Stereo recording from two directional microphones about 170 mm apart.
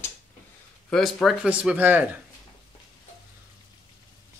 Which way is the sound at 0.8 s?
Centre (ahead or behind).